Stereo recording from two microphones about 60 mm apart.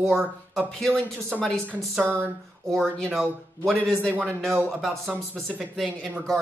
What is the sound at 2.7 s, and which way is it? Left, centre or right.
Speech, centre.